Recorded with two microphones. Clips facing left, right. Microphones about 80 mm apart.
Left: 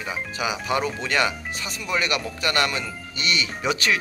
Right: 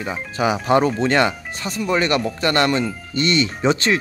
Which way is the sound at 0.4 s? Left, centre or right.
Right.